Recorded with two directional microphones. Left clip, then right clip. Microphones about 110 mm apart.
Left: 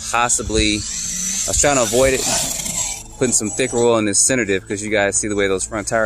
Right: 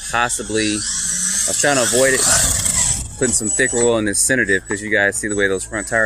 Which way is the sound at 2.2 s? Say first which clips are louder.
Right 4 dB; 25° right (ahead or behind).